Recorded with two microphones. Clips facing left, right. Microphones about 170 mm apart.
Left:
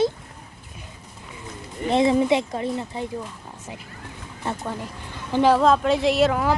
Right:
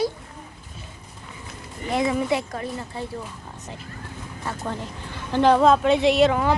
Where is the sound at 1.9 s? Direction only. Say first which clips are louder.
Left 4 dB; 25° left (ahead or behind).